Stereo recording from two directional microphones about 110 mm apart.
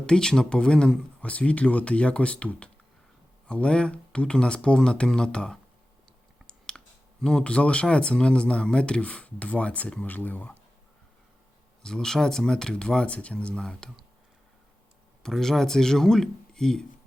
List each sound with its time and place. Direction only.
0.0 s speech: 5° left (ahead or behind)
11.8 s speech: 5° left (ahead or behind)
15.2 s speech: 5° left (ahead or behind)